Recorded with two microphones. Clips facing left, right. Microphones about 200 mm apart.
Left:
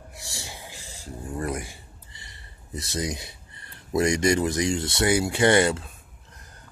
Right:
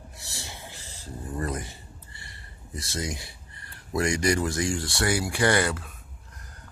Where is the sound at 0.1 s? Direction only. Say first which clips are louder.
Left 3 dB; 15° left (ahead or behind).